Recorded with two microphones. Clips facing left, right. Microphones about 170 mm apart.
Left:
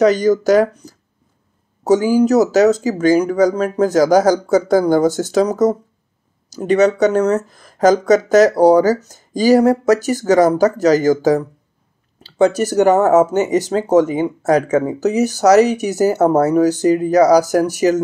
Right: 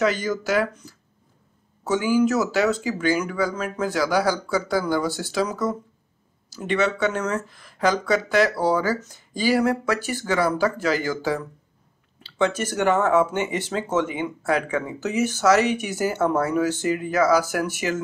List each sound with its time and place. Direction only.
0.0 s speech: 40° left (ahead or behind)